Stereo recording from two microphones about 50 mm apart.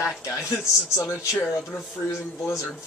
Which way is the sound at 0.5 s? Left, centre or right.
Left.